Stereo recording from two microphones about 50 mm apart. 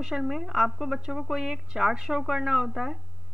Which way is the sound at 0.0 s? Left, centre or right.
Centre.